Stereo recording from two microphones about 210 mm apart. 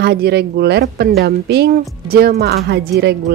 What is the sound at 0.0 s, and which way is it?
Speech, 50° right (ahead or behind).